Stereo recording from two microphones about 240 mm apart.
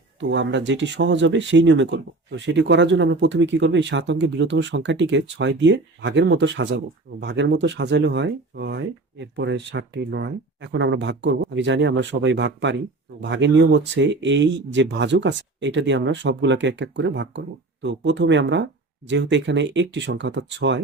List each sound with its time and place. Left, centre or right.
0.2 s speech: right